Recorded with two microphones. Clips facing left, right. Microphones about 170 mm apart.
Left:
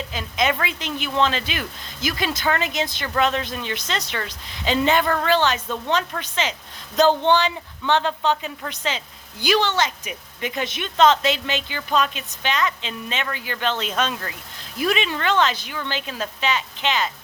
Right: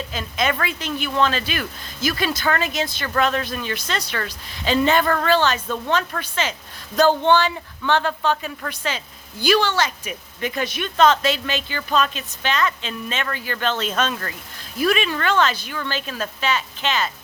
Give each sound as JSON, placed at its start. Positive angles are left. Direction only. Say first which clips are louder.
{"t": 0.1, "sound": "a woman's voice", "louder": "left 1 dB", "side_deg": 20}